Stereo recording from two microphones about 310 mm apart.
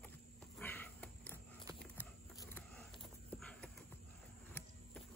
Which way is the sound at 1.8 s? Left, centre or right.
Centre.